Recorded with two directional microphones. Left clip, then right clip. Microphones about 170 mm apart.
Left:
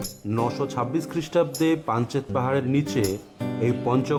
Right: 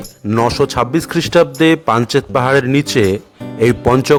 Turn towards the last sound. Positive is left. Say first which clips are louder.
# right 13 dB
turn(degrees=-40)  # may be behind; listen again after turning